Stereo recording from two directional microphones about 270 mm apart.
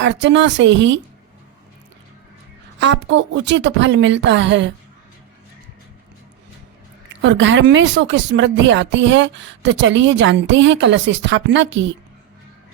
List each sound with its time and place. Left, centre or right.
0.0 s speech: right
2.7 s speech: right
7.2 s speech: right